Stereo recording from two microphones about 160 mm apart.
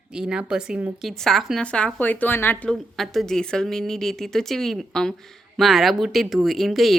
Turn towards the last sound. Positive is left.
turn(degrees=0)  # may be behind; listen again after turning